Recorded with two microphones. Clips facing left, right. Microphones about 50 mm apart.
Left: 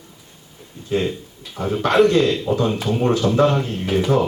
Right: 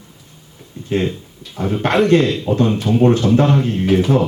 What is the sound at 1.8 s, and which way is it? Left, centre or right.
A man's voice, right.